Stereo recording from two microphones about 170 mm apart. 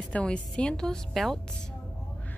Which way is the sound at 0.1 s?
5° left (ahead or behind).